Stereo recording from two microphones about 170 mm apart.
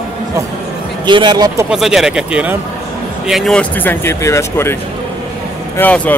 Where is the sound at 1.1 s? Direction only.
25° right (ahead or behind).